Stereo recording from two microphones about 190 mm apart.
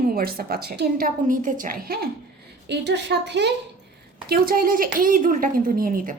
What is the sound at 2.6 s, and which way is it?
Speech, 65° right (ahead or behind).